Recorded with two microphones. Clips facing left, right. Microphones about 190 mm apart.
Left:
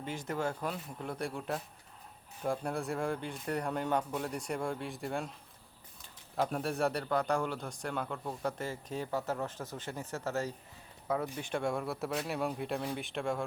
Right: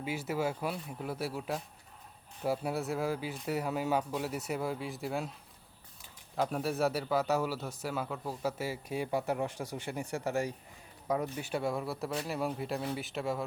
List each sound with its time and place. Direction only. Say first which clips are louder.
0.0 s a man's voice: right 2 dB; 5° right (ahead or behind)
6.3 s a man's voice: right 1 dB; centre (ahead or behind)